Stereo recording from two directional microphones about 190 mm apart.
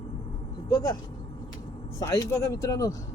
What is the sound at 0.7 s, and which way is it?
Speech, 20° left (ahead or behind).